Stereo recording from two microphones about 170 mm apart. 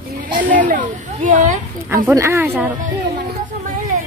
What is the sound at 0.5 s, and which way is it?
Speech, 50° right (ahead or behind).